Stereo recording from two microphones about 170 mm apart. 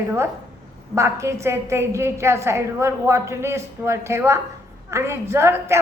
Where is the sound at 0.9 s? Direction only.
15° right (ahead or behind).